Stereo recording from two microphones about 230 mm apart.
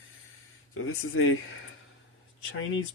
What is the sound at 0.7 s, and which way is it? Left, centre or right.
Speech, left.